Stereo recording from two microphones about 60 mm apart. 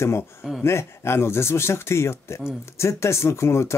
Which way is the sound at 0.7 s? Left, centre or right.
Left.